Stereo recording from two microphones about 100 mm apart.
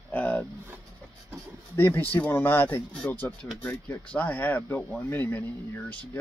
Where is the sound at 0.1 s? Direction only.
15° left (ahead or behind).